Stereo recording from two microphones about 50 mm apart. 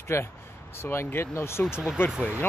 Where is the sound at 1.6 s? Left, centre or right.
Centre.